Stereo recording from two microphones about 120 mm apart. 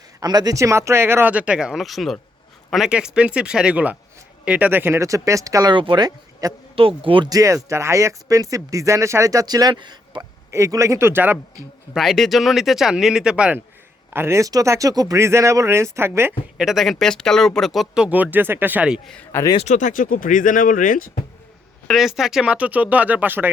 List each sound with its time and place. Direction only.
0.2 s speech: 35° right (ahead or behind); by 5.0 s 15° right (ahead or behind)
5.0 s speech: 25° right (ahead or behind)
5.7 s speech: 40° right (ahead or behind)
6.7 s speech: 50° right (ahead or behind)
7.3 s speech: 30° right (ahead or behind)
10.5 s speech: 25° right (ahead or behind)
11.9 s speech: centre (ahead or behind)
14.1 s speech: 20° right (ahead or behind)
16.6 s speech: centre (ahead or behind)
19.6 s speech: 90° left
21.8 s speech: centre (ahead or behind)